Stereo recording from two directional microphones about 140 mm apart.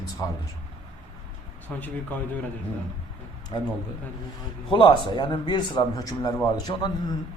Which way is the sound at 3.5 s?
35° left (ahead or behind).